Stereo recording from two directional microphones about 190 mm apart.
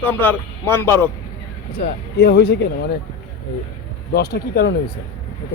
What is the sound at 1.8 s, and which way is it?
Speech, 60° left (ahead or behind).